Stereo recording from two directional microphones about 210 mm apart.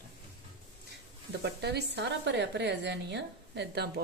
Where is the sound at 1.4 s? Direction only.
50° right (ahead or behind).